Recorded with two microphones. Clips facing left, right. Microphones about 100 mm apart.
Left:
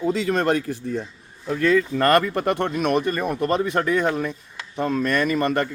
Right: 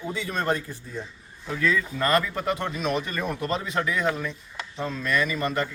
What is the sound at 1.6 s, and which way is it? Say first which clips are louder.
A man's voice: left 6 dB; 60° left (ahead or behind).